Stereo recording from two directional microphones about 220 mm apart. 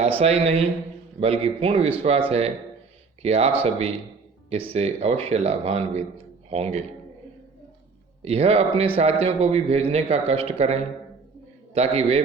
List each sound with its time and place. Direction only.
0.2 s a man's voice: 30° right (ahead or behind)
8.2 s a man's voice: 30° right (ahead or behind)